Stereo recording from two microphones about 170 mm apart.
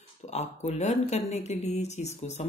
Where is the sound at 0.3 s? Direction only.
40° left (ahead or behind).